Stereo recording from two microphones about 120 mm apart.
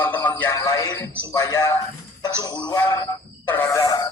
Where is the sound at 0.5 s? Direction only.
30° left (ahead or behind).